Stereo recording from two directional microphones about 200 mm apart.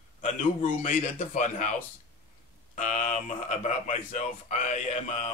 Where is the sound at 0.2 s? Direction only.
40° left (ahead or behind).